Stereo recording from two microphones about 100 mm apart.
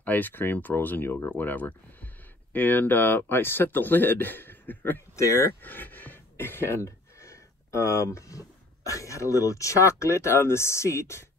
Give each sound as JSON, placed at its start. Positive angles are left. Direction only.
{"t": 0.0, "sound": "speech", "side_deg": 20}
{"t": 5.1, "sound": "speech", "side_deg": 30}